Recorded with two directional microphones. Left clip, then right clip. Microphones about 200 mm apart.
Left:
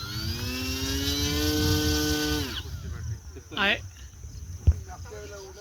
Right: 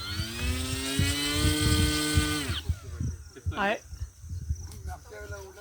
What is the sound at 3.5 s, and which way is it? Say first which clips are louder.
Speech: left 3 dB; 30° right (ahead or behind).